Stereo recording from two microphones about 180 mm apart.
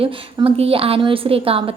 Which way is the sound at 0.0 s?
30° right (ahead or behind).